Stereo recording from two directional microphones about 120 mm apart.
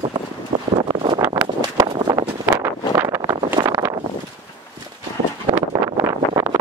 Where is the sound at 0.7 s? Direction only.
45° right (ahead or behind).